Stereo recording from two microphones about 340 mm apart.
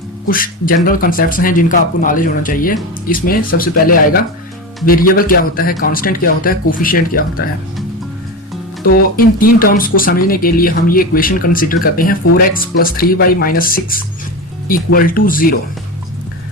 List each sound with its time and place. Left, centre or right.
0.3 s speech: left
8.9 s speech: left